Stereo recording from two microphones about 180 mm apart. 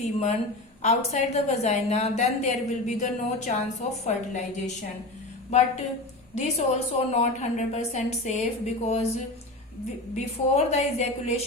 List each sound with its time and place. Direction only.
0.0 s a woman's voice: 40° left (ahead or behind)
10.2 s a woman's voice: 35° left (ahead or behind)